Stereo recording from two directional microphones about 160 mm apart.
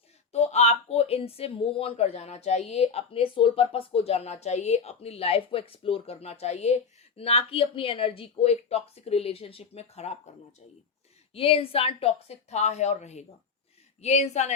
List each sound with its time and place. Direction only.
0.3 s speech: 45° left (ahead or behind)
11.3 s speech: 35° left (ahead or behind)